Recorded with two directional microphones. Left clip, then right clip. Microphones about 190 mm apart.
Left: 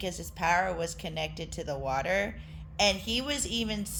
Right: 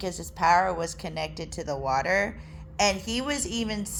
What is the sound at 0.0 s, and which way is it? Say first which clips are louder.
A woman's voice: right 6 dB; 10° right (ahead or behind).